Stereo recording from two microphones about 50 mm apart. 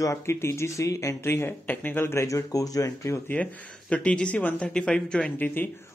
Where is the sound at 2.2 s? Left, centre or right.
Left.